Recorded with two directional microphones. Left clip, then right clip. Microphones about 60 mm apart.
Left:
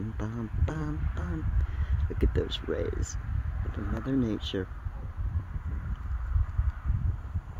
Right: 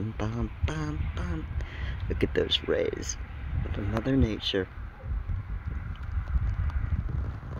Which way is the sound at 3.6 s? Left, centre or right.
Left.